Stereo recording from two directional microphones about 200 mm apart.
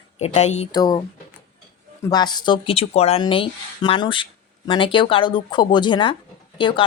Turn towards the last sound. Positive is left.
turn(degrees=25)  # may be behind; listen again after turning